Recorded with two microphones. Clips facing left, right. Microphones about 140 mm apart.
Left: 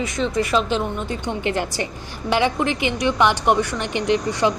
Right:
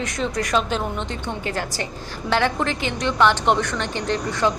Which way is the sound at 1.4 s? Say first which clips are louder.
Left 4 dB; 20° left (ahead or behind).